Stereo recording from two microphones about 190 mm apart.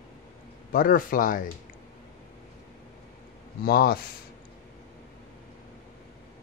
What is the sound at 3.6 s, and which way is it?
Speech, 55° left (ahead or behind).